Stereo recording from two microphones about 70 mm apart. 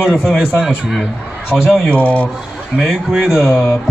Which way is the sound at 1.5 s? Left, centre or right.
Left.